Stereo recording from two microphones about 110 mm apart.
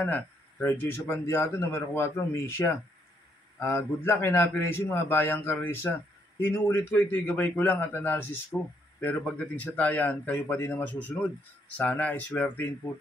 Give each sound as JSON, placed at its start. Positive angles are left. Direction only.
{"t": 0.0, "sound": "a man's voice", "side_deg": 15}